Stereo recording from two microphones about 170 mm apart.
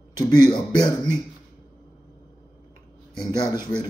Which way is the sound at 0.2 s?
25° left (ahead or behind).